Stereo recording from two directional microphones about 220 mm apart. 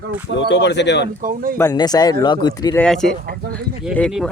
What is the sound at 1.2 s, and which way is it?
Speech, 40° right (ahead or behind).